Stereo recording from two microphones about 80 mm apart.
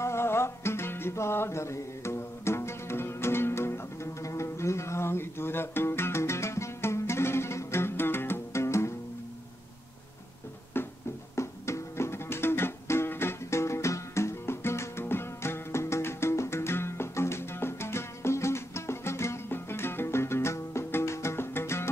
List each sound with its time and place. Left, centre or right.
0.0 s music: left
10.8 s music: left